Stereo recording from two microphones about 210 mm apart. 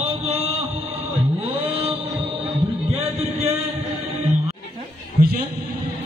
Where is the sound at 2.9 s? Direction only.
30° right (ahead or behind).